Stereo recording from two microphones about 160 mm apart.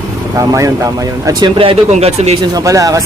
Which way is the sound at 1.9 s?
40° right (ahead or behind).